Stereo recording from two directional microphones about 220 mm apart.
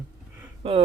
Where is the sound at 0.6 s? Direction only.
25° right (ahead or behind).